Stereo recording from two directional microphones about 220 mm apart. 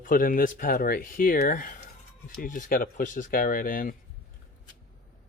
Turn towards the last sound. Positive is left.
turn(degrees=40)  # may be behind; listen again after turning